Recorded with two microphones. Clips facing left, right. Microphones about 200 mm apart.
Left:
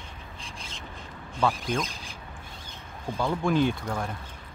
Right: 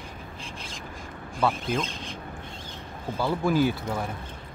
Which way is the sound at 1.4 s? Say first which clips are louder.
Right 1 dB; 5° right (ahead or behind).